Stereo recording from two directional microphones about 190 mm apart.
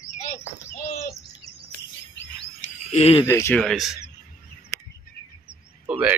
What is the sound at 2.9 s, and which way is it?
Speech, 30° left (ahead or behind).